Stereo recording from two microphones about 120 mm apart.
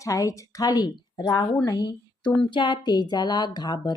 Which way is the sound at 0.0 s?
30° left (ahead or behind).